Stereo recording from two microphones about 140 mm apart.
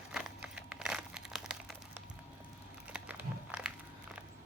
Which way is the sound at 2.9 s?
10° right (ahead or behind).